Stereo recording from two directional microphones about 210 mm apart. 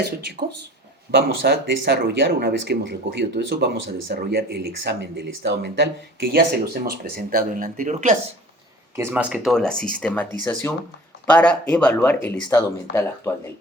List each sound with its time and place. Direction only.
0.0 s speech: 50° right (ahead or behind)
9.0 s speech: 10° right (ahead or behind); by 13.3 s 15° left (ahead or behind)